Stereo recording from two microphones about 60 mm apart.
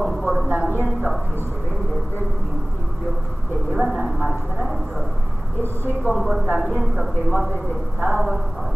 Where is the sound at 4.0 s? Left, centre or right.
Centre.